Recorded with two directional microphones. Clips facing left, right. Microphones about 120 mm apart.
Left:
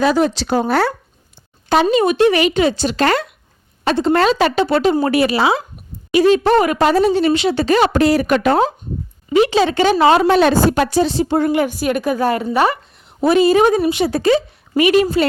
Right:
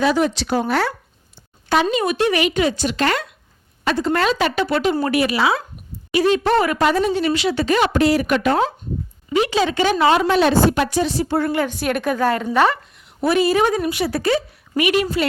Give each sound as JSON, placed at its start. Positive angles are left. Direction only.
{"t": 0.0, "sound": "a woman's voice", "side_deg": 40}
{"t": 3.8, "sound": "a woman's voice", "side_deg": 25}
{"t": 6.8, "sound": "a woman's voice", "side_deg": 30}
{"t": 11.8, "sound": "a woman's voice", "side_deg": 5}
{"t": 13.1, "sound": "a woman's voice", "side_deg": 25}